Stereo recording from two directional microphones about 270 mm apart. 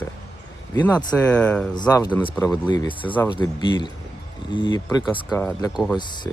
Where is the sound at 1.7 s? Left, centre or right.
Centre.